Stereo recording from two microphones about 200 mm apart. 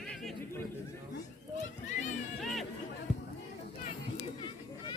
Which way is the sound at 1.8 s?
35° left (ahead or behind).